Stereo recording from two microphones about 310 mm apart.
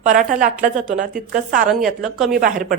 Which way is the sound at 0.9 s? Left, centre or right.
Right.